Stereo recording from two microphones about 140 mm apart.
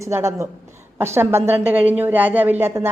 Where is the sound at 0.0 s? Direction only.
20° right (ahead or behind).